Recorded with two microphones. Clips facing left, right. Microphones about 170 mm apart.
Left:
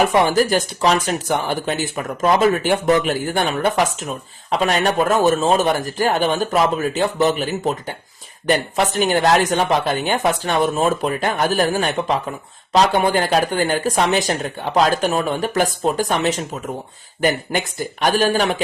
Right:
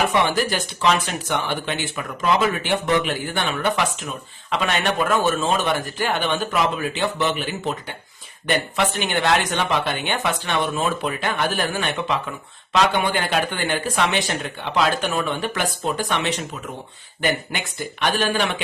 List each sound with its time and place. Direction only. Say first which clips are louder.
0.0 s speech: left 5 dB; 40° left (ahead or behind)